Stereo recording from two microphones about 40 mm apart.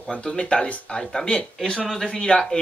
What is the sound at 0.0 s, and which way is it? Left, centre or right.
Speech, centre.